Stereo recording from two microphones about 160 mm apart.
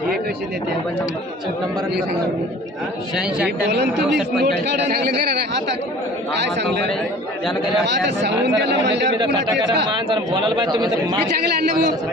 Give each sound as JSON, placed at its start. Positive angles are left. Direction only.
{"t": 3.2, "sound": "speech", "side_deg": -5}
{"t": 4.4, "sound": "a man's voice", "side_deg": -90}
{"t": 7.9, "sound": "a man's voice", "side_deg": -90}
{"t": 10.1, "sound": "a man's voice", "side_deg": -30}
{"t": 11.7, "sound": "a man's voice", "side_deg": -50}